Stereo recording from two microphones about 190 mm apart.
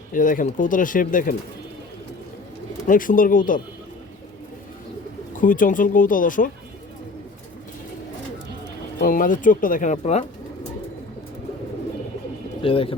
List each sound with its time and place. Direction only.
0.1 s speech: 45° left (ahead or behind)
2.8 s speech: 45° left (ahead or behind)
5.3 s speech: 45° left (ahead or behind)
9.0 s speech: 45° left (ahead or behind)
12.6 s speech: 30° left (ahead or behind)